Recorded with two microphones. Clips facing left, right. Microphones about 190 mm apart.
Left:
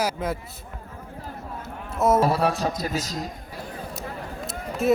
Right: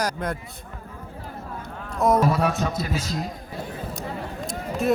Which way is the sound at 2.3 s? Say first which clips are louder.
Even; 35° left (ahead or behind).